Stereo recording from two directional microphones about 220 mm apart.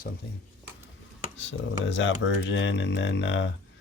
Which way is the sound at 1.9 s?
55° left (ahead or behind).